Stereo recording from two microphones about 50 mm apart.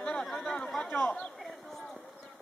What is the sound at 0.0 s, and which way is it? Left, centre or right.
Chatter, left.